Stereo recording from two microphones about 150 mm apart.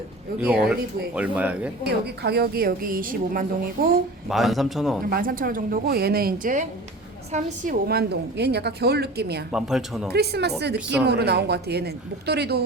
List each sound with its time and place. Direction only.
0.6 s speech: 5° right (ahead or behind)
1.8 s a woman's voice: 90° right; by 3.9 s 70° right (ahead or behind)
4.3 s speech: centre (ahead or behind)
5.0 s a woman's voice: 75° right (ahead or behind); by 9.4 s 90° right
9.5 s speech: 5° right (ahead or behind)
10.1 s a woman's voice: 90° right